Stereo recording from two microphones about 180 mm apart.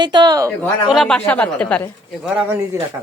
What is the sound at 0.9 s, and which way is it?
A woman's voice, centre (ahead or behind).